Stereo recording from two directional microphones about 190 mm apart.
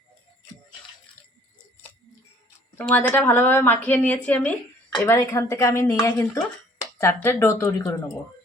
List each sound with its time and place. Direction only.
2.7 s a woman's voice: 10° left (ahead or behind)